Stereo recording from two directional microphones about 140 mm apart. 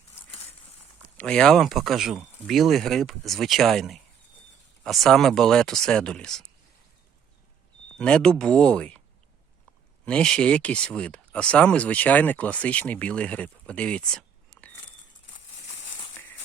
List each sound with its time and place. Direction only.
1.1 s speech: 10° left (ahead or behind)
7.9 s speech: 5° left (ahead or behind)
10.1 s speech: 5° left (ahead or behind)